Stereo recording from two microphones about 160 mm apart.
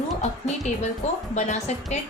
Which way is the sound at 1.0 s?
45° left (ahead or behind).